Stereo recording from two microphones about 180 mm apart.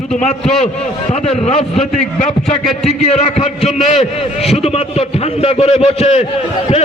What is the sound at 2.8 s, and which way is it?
A man's voice, 35° left (ahead or behind).